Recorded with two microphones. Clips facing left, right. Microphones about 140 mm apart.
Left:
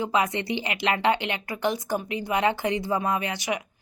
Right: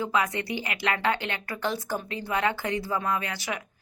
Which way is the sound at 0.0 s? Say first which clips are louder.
Left 2 dB; 20° left (ahead or behind).